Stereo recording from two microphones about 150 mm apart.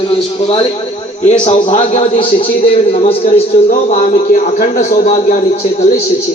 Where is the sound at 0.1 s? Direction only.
40° left (ahead or behind).